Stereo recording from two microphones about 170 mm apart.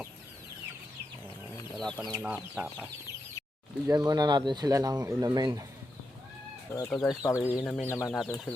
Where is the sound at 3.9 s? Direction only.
25° right (ahead or behind).